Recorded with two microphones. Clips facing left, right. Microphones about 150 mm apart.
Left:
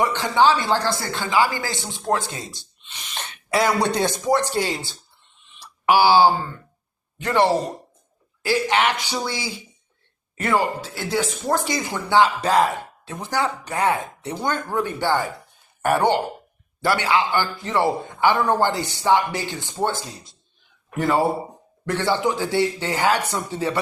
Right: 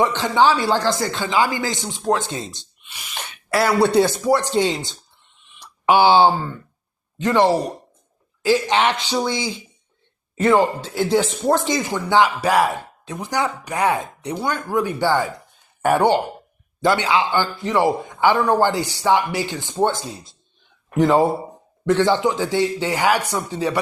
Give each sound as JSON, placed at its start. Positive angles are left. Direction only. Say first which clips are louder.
{"t": 0.3, "sound": "speech", "louder": "right 1 dB", "side_deg": -15}
{"t": 2.8, "sound": "speech", "louder": "right 1 dB", "side_deg": -10}
{"t": 4.5, "sound": "speech", "louder": "right 5 dB", "side_deg": -20}
{"t": 5.5, "sound": "a sound", "louder": "right 2 dB", "side_deg": -15}
{"t": 7.2, "sound": "speech", "louder": "right 2 dB", "side_deg": -15}
{"t": 10.9, "sound": "speech", "louder": "right 6 dB", "side_deg": -5}
{"t": 11.5, "sound": "speech", "louder": "right 1 dB", "side_deg": -20}
{"t": 21.0, "sound": "speech", "louder": "right 4 dB", "side_deg": -15}